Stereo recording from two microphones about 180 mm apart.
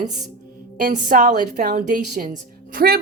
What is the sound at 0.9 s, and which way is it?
A woman's voice, 45° right (ahead or behind).